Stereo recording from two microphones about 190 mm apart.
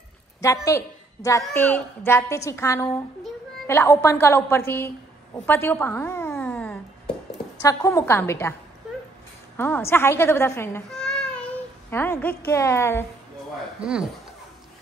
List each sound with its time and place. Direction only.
0.4 s a woman's voice: 15° left (ahead or behind)
9.6 s a woman's voice: 10° left (ahead or behind)
13.7 s speech: 5° right (ahead or behind)